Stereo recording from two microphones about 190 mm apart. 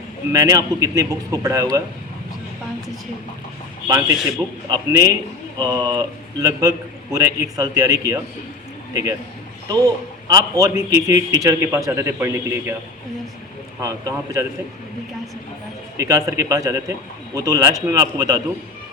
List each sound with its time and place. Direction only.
0.3 s a man's voice: 20° right (ahead or behind)
3.8 s a man's voice: 20° right (ahead or behind)
13.8 s a man's voice: 15° right (ahead or behind)
16.0 s a man's voice: 15° right (ahead or behind)